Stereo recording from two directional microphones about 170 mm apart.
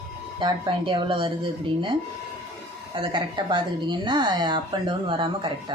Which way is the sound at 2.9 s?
30° right (ahead or behind).